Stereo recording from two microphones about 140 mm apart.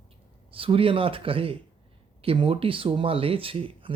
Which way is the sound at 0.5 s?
40° right (ahead or behind).